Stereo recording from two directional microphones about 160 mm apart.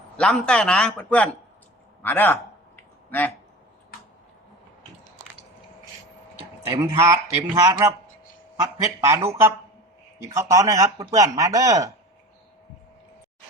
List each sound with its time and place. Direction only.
0.2 s a man's voice: 5° left (ahead or behind)
6.8 s speech: 15° right (ahead or behind)